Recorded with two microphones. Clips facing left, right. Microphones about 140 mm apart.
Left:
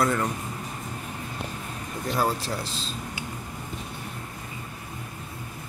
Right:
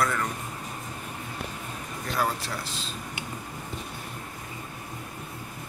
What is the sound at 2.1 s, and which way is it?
Speech, 35° left (ahead or behind).